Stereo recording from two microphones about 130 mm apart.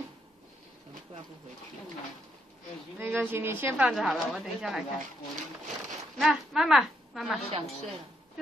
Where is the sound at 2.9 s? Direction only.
15° right (ahead or behind).